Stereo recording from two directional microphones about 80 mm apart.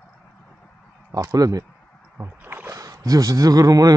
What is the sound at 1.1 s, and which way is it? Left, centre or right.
Speech, right.